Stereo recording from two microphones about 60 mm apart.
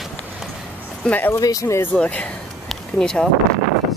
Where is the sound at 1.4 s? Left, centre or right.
Left.